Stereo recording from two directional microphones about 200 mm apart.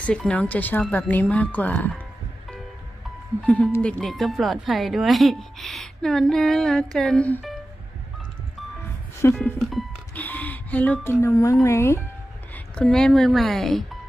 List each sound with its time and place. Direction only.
0.0 s speech: 5° left (ahead or behind)
3.4 s speech: 5° left (ahead or behind)
9.3 s music: centre (ahead or behind)
11.6 s speech: 15° left (ahead or behind)
12.7 s speech: 5° left (ahead or behind)